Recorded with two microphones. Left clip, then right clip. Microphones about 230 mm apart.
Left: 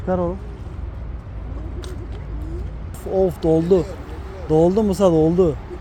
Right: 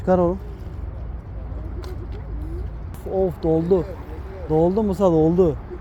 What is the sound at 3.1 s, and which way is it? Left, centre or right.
Speech, centre.